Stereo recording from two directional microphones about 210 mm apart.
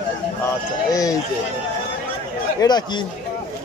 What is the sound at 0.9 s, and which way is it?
Speech, 15° left (ahead or behind).